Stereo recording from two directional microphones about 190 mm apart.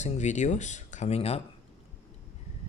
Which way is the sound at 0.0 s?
40° left (ahead or behind).